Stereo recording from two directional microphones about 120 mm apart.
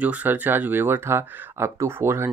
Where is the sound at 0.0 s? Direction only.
10° right (ahead or behind).